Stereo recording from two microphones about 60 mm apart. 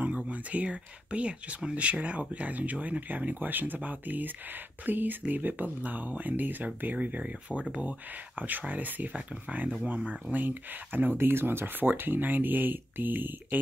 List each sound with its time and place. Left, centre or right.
0.3 s speech: right